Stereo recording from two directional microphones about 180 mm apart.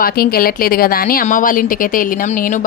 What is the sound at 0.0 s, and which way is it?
A woman's voice, 55° left (ahead or behind).